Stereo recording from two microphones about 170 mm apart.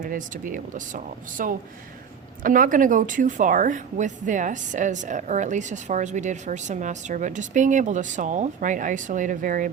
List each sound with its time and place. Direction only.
0.0 s speech: 50° right (ahead or behind)